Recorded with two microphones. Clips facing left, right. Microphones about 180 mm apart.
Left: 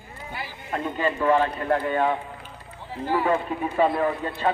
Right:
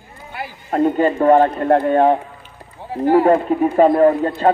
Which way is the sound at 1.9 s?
50° right (ahead or behind).